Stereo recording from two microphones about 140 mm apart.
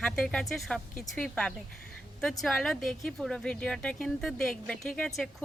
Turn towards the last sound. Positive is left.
turn(degrees=5)  # may be behind; listen again after turning